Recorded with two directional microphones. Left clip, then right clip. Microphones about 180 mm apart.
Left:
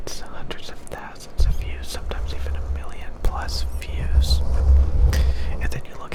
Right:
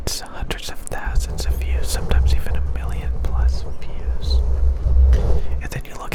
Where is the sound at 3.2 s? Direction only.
15° left (ahead or behind).